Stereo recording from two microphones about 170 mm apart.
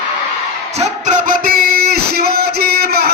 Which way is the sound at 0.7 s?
45° right (ahead or behind).